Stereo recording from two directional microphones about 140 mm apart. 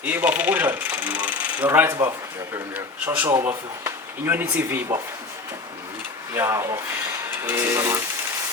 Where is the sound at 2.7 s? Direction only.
10° right (ahead or behind).